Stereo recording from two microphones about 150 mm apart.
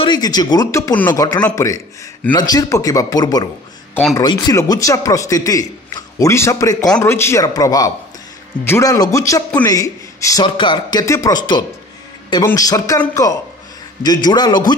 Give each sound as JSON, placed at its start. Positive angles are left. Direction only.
{"t": 0.0, "sound": "a man's voice", "side_deg": 30}